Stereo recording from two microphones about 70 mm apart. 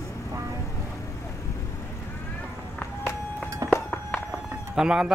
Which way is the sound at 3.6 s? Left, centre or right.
Right.